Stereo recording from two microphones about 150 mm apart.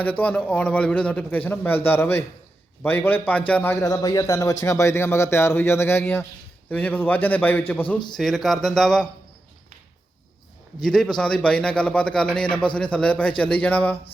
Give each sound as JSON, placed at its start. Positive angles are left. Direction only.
{"t": 0.0, "sound": "a man's voice", "side_deg": 10}
{"t": 10.8, "sound": "a man's voice", "side_deg": 5}